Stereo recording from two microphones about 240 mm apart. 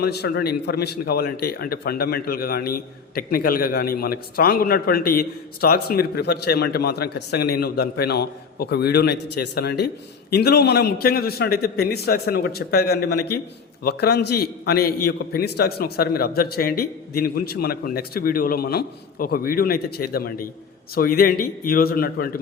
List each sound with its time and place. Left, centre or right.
0.0 s a man's voice: left